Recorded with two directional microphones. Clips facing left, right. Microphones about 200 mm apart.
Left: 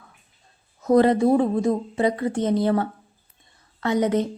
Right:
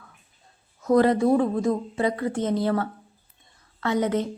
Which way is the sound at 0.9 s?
25° left (ahead or behind).